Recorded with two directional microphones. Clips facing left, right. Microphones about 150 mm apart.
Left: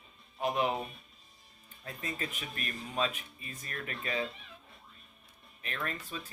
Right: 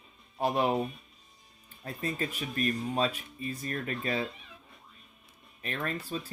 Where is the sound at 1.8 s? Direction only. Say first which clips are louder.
Right 5 dB; 35° right (ahead or behind).